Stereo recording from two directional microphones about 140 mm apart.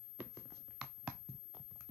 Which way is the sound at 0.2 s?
10° right (ahead or behind).